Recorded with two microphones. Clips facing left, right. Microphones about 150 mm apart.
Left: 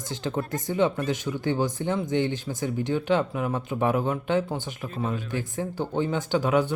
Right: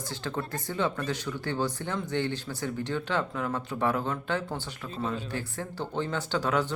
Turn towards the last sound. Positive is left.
turn(degrees=15)  # may be behind; listen again after turning